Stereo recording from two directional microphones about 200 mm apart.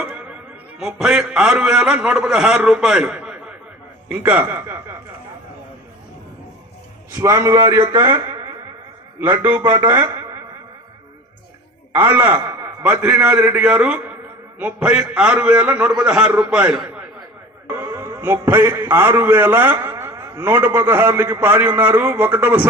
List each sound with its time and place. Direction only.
0.0 s a sound: 5° right (ahead or behind)
0.8 s a man's voice: 5° right (ahead or behind)
7.1 s a man's voice: 15° right (ahead or behind)
9.4 s a man's voice: 10° right (ahead or behind)
11.9 s a man's voice: 10° right (ahead or behind)